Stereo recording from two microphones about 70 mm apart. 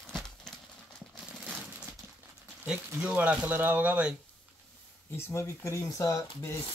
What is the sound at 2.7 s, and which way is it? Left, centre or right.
Speech, centre.